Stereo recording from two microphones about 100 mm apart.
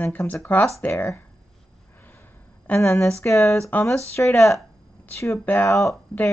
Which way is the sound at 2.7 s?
25° left (ahead or behind).